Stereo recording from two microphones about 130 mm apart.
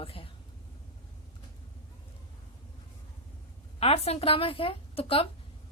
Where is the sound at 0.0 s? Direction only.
45° left (ahead or behind).